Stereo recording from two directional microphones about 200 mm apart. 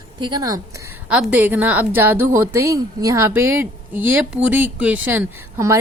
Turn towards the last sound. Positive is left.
turn(degrees=-15)  # may be behind; listen again after turning